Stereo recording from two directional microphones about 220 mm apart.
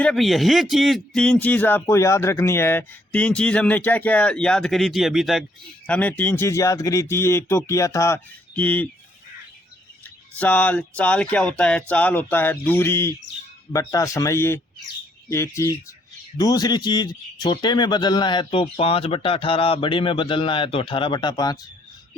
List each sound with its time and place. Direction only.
0.0 s speech: centre (ahead or behind)
10.0 s speech: 5° left (ahead or behind)